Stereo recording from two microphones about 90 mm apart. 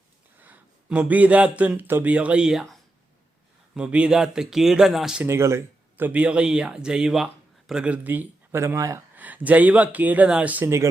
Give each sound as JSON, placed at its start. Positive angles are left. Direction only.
{"t": 0.3, "sound": "speech", "side_deg": -20}
{"t": 3.8, "sound": "speech", "side_deg": -10}
{"t": 5.2, "sound": "speech", "side_deg": -30}
{"t": 6.1, "sound": "speech", "side_deg": -15}
{"t": 8.6, "sound": "speech", "side_deg": -35}
{"t": 9.1, "sound": "speech", "side_deg": -20}